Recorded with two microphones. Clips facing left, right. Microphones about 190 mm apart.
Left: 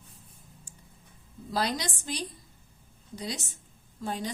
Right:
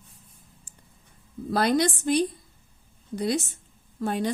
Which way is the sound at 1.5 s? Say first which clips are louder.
Right 8 dB; 60° right (ahead or behind).